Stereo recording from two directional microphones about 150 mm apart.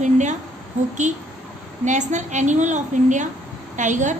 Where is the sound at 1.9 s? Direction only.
55° right (ahead or behind).